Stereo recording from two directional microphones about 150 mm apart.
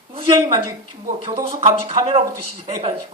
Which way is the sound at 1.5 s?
35° right (ahead or behind).